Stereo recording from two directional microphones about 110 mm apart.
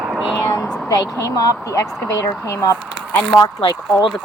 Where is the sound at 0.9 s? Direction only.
30° left (ahead or behind).